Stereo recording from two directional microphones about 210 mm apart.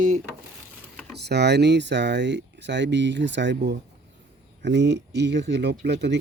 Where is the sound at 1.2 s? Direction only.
55° right (ahead or behind).